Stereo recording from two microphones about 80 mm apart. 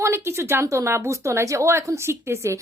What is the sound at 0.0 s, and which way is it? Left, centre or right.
A woman's voice, right.